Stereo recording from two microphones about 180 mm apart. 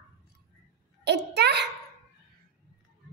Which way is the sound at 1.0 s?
70° right (ahead or behind).